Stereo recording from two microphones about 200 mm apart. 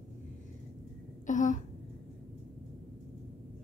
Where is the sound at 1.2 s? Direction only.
40° left (ahead or behind).